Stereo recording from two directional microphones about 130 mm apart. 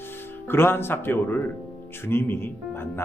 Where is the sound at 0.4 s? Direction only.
15° left (ahead or behind).